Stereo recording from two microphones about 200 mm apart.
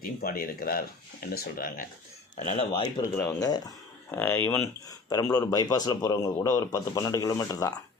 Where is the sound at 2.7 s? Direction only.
25° left (ahead or behind).